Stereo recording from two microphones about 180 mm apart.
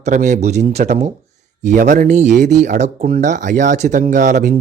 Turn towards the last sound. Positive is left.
turn(degrees=-40)  # may be behind; listen again after turning